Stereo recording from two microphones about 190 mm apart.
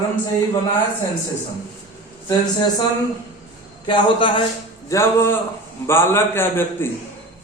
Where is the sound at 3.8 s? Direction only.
25° left (ahead or behind).